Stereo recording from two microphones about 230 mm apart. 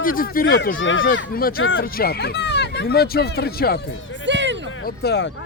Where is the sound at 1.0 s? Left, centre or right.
Left.